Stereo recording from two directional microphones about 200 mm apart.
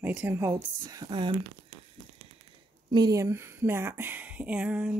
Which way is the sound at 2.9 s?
20° right (ahead or behind).